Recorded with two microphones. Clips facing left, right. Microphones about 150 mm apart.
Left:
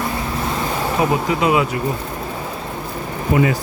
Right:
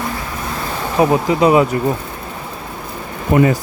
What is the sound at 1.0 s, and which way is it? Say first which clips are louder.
Speech: right 6 dB; 35° right (ahead or behind).